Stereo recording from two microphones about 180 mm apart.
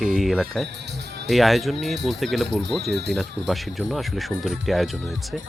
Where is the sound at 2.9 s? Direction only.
70° right (ahead or behind).